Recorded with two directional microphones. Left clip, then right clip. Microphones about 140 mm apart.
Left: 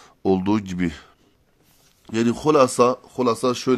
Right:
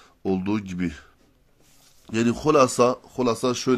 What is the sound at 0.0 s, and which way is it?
Speech, 40° left (ahead or behind).